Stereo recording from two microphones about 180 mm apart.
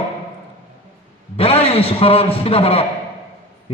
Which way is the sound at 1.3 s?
35° left (ahead or behind).